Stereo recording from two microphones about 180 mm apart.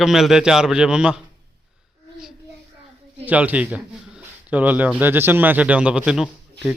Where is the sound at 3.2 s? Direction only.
10° right (ahead or behind).